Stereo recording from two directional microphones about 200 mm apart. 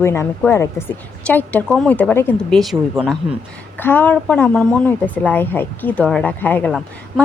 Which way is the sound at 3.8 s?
10° left (ahead or behind).